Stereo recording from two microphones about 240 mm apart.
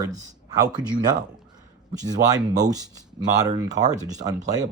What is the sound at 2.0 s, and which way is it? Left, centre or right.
Speech, centre.